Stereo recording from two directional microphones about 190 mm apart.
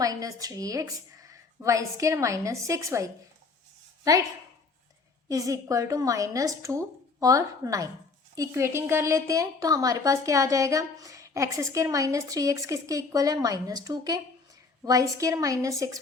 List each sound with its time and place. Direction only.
0.0 s a woman's voice: 20° right (ahead or behind)
5.3 s a woman's voice: 15° right (ahead or behind)